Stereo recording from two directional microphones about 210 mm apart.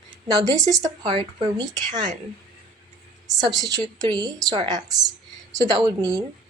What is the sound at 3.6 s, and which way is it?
A woman's voice, 15° right (ahead or behind).